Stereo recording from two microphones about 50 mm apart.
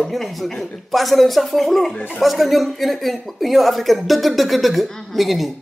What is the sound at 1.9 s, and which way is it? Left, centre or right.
Speech, left.